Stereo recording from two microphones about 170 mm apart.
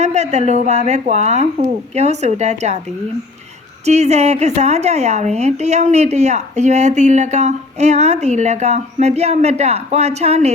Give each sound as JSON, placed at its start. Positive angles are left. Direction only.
{"t": 0.0, "sound": "a woman's voice", "side_deg": -40}
{"t": 3.8, "sound": "a woman's voice", "side_deg": -40}